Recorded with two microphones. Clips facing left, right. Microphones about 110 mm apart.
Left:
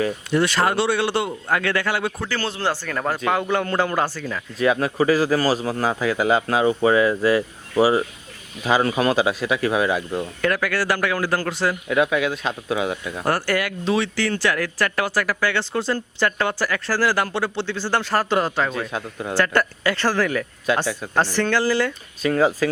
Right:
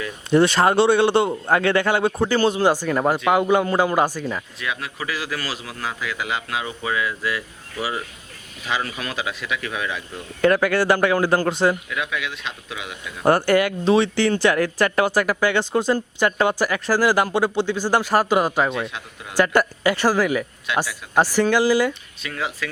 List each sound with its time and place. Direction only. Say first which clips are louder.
0.3 s speech: right 6 dB; 25° right (ahead or behind)
4.6 s a man's voice: left 14 dB; 40° left (ahead or behind)
10.4 s speech: right 6 dB; 25° right (ahead or behind)
11.9 s a man's voice: left 8 dB; 40° left (ahead or behind)
13.2 s speech: right 6 dB; 20° right (ahead or behind)
18.9 s a man's voice: left 7 dB; 40° left (ahead or behind)
19.4 s speech: right 3 dB; 15° right (ahead or behind)
20.7 s a man's voice: left 2 dB; 40° left (ahead or behind)
21.2 s speech: right 3 dB; 10° right (ahead or behind)
22.2 s a man's voice: left 10 dB; 40° left (ahead or behind)